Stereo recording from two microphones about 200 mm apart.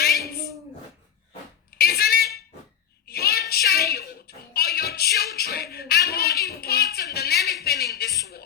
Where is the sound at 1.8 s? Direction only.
50° left (ahead or behind).